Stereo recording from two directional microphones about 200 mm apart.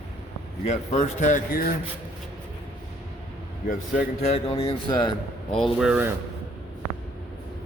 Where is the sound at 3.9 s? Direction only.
35° left (ahead or behind).